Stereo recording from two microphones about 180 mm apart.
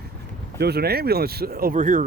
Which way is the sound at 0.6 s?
60° right (ahead or behind).